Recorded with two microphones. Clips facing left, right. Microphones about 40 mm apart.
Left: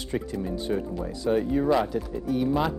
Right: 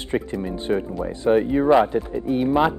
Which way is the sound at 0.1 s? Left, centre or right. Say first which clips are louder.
Right 5 dB; right.